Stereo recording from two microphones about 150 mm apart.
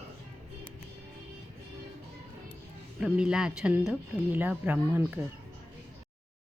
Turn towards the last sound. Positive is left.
turn(degrees=-10)  # may be behind; listen again after turning